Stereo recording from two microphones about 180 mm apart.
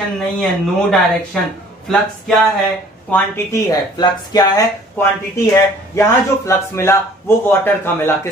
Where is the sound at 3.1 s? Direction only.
15° left (ahead or behind).